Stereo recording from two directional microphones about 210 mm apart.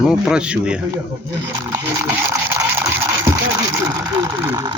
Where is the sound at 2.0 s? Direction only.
10° right (ahead or behind).